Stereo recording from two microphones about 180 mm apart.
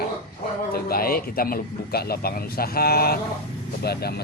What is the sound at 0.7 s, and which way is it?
Speech, 55° left (ahead or behind).